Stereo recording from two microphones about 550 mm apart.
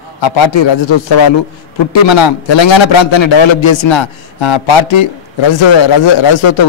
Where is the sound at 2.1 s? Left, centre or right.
Left.